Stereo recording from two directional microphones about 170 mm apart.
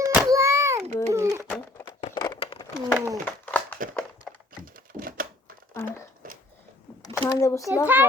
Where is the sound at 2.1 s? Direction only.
20° left (ahead or behind).